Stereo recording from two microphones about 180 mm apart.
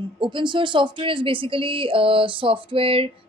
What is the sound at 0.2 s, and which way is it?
Speech, 25° right (ahead or behind).